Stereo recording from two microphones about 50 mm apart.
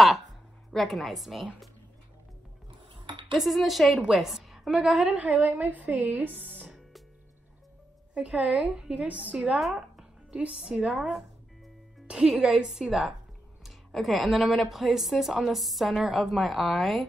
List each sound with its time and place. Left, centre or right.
0.7 s speech: centre
3.3 s a woman's voice: centre
5.1 s a woman's voice: right
8.1 s a woman's voice: right
9.6 s music: centre
10.6 s a woman's voice: centre
12.4 s a woman's voice: centre